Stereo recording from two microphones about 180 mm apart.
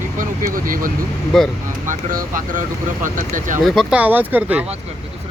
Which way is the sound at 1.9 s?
45° right (ahead or behind).